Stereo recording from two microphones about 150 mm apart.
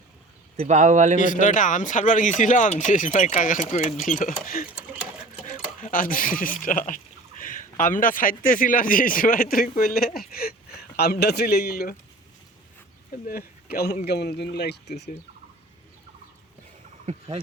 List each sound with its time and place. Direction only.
0.5 s speech: 45° right (ahead or behind)
1.2 s speech: 60° left (ahead or behind); by 10.1 s 75° left (ahead or behind)
10.2 s speech: 90° left
13.2 s speech: 85° left
17.1 s speech: 40° right (ahead or behind)